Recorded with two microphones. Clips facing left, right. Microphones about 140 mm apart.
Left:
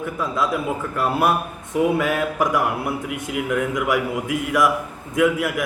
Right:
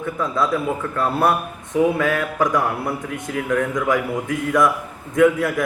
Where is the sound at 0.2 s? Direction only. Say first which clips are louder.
Right 2 dB; 10° left (ahead or behind).